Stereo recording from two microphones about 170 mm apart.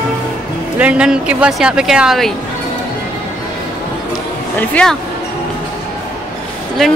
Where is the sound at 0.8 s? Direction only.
5° right (ahead or behind).